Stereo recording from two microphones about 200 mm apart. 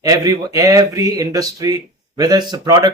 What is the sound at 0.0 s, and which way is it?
Speech, 15° right (ahead or behind).